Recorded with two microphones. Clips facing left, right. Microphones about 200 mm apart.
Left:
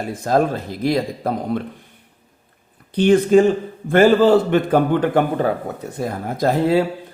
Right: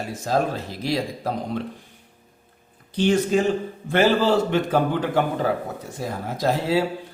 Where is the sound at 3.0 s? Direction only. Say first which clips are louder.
Left 7 dB; 55° left (ahead or behind).